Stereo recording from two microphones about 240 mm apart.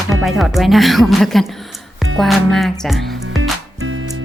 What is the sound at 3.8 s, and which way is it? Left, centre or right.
Music, right.